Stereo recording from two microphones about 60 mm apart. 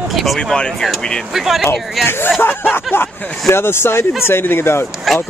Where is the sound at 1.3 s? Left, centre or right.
Centre.